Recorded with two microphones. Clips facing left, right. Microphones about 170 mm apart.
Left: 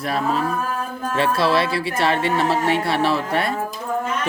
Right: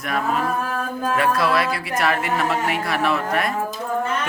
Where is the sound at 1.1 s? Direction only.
30° left (ahead or behind).